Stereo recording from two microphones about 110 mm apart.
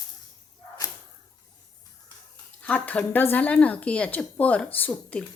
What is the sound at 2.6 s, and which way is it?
Speech, 10° left (ahead or behind).